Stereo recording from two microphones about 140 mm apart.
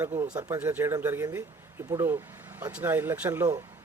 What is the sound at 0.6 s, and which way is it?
A man's voice, 15° right (ahead or behind).